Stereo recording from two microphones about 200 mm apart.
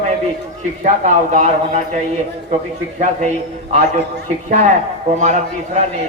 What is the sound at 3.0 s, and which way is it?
A man's voice, 35° right (ahead or behind).